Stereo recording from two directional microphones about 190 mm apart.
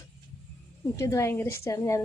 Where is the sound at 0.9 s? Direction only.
15° left (ahead or behind).